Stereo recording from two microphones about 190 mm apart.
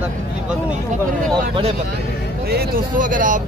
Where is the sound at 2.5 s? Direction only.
45° right (ahead or behind).